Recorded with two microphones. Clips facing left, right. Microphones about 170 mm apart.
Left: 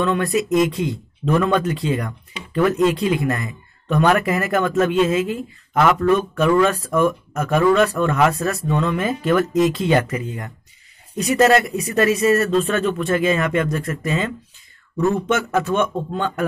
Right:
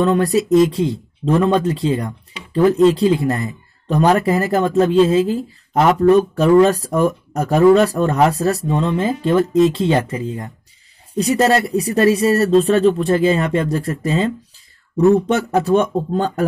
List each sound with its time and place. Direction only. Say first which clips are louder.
0.0 s speech: right 4 dB; 35° right (ahead or behind)